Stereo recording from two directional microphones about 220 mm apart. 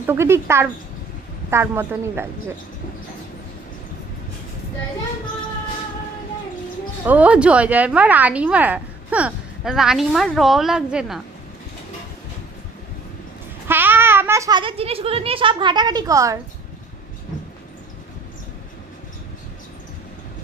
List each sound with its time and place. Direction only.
0.0 s a woman's voice: 10° right (ahead or behind)
7.0 s a woman's voice: 5° right (ahead or behind)
13.7 s a child's voice: 10° right (ahead or behind)